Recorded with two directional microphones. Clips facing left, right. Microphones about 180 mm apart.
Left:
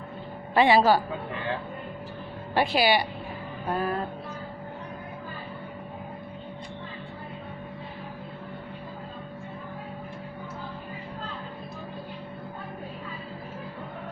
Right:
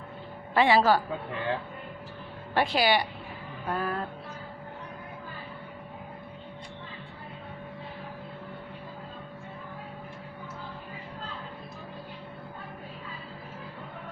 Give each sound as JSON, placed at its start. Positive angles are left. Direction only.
{"t": 0.5, "sound": "a woman's voice", "side_deg": 15}
{"t": 2.6, "sound": "a woman's voice", "side_deg": 10}
{"t": 3.7, "sound": "music", "side_deg": 20}